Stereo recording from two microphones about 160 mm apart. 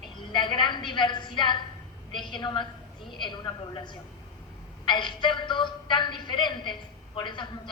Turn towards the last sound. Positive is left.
turn(degrees=30)  # may be behind; listen again after turning